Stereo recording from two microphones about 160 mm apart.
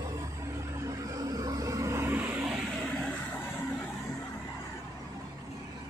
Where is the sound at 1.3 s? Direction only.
20° right (ahead or behind).